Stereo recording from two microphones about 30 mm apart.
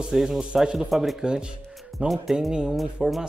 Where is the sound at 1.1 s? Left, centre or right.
Right.